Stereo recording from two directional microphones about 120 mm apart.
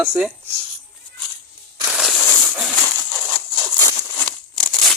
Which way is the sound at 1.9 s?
Centre (ahead or behind).